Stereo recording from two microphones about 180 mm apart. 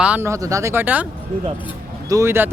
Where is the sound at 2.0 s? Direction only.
15° right (ahead or behind).